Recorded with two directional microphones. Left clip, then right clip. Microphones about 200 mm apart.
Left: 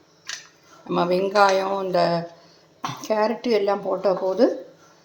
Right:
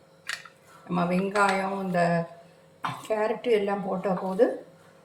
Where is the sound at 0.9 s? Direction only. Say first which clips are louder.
Left 7 dB; 35° left (ahead or behind).